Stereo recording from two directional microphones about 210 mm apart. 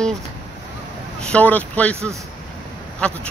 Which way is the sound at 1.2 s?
5° left (ahead or behind).